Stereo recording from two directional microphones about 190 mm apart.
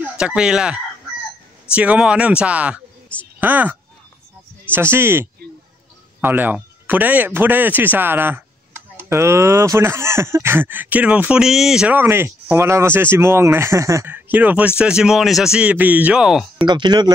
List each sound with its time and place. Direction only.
0.0 s speech: 5° right (ahead or behind)
1.8 s speech: 5° right (ahead or behind)
4.7 s speech: 10° right (ahead or behind)
16.5 s speech: 25° right (ahead or behind)